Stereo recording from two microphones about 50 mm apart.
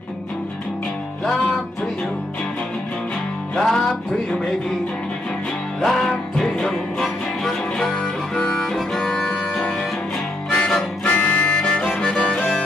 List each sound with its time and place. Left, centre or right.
1.2 s music: centre
3.5 s music: centre
5.8 s music: centre
10.5 s harmonica: centre
11.1 s music: left
11.5 s harmonica: centre
12.0 s music: centre